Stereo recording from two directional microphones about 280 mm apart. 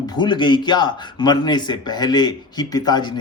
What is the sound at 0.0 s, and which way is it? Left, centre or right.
A man's voice, centre.